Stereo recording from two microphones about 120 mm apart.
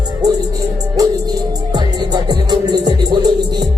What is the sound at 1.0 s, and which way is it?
Music, 30° right (ahead or behind).